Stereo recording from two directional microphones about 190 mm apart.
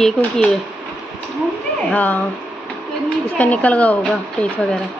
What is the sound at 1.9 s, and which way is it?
Speech, 10° left (ahead or behind).